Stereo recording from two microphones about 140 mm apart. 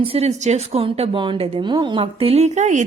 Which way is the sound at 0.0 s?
45° right (ahead or behind).